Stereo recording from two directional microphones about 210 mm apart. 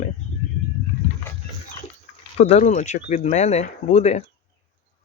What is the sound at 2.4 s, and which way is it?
Speech, 30° left (ahead or behind).